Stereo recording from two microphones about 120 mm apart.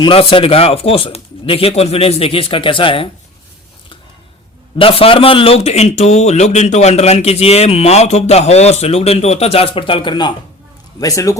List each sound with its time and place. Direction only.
0.0 s speech: 50° left (ahead or behind)
4.8 s a man's voice: 50° left (ahead or behind)
11.0 s speech: 25° left (ahead or behind)